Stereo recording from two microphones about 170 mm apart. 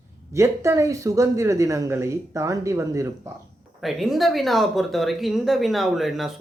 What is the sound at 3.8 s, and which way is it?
Speech, centre (ahead or behind).